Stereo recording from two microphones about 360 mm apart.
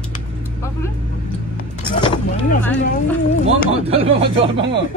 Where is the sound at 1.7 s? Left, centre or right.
Centre.